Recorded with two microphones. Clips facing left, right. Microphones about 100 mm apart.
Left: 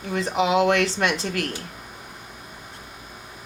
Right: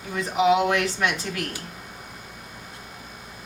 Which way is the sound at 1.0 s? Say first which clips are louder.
Left 2 dB; 90° left.